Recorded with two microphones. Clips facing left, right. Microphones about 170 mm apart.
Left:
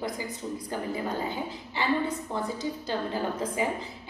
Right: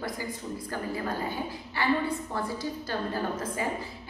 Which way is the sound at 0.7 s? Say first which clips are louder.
Left 1 dB; 20° left (ahead or behind).